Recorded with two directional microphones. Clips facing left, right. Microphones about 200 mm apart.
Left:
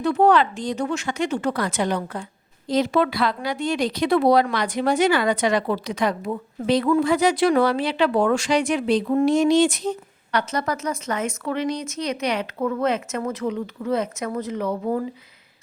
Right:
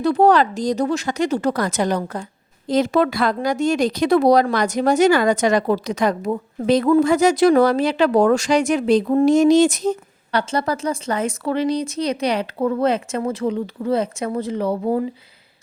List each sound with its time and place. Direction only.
0.0 s speech: 35° right (ahead or behind)
10.5 s speech: 30° right (ahead or behind)